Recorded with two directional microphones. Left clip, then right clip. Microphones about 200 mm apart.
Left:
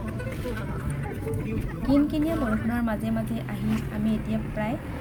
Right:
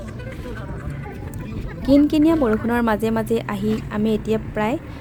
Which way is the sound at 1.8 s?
50° right (ahead or behind).